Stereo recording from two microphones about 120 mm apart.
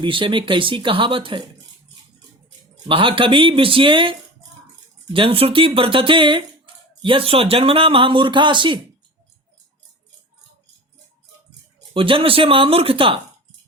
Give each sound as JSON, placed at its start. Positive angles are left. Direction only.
{"t": 0.0, "sound": "speech", "side_deg": -45}
{"t": 2.8, "sound": "speech", "side_deg": -45}
{"t": 5.1, "sound": "speech", "side_deg": -50}
{"t": 11.9, "sound": "speech", "side_deg": -45}